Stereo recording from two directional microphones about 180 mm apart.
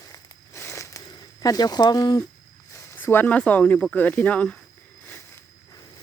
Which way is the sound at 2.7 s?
10° left (ahead or behind).